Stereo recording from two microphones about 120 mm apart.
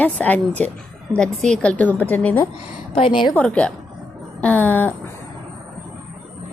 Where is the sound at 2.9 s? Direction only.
45° left (ahead or behind).